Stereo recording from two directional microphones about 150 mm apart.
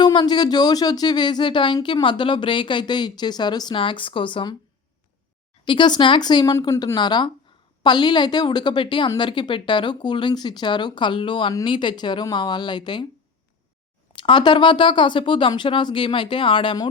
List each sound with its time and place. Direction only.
0.0 s a woman's voice: 30° left (ahead or behind)
5.6 s a woman's voice: 30° left (ahead or behind)
14.2 s a woman's voice: 30° left (ahead or behind)